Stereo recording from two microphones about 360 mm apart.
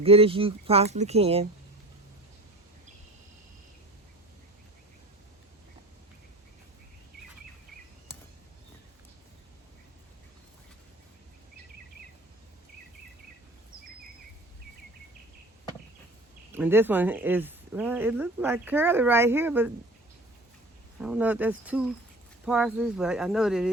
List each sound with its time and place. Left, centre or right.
0.0 s speech: centre
16.6 s speech: centre
21.0 s speech: centre